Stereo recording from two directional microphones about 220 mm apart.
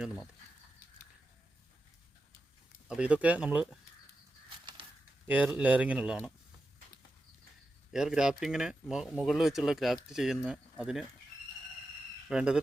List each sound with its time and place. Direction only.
0.0 s speech: centre (ahead or behind)
2.8 s speech: 5° right (ahead or behind)
4.4 s bird flight: 20° right (ahead or behind)
5.3 s speech: 5° right (ahead or behind)
7.9 s speech: 5° right (ahead or behind)
12.3 s speech: 5° right (ahead or behind)